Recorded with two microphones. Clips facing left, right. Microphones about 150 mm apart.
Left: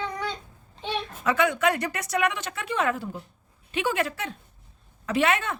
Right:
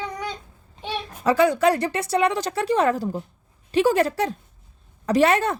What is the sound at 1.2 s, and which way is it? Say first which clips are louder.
Speech: right 6 dB; 35° right (ahead or behind).